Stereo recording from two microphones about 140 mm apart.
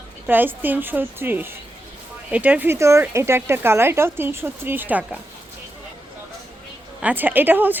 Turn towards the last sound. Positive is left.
turn(degrees=-15)  # may be behind; listen again after turning